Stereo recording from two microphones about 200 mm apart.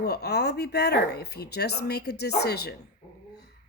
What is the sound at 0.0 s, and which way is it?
Speech, 55° left (ahead or behind).